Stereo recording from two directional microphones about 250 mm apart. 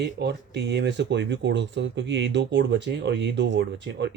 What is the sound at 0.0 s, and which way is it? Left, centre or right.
Speech, right.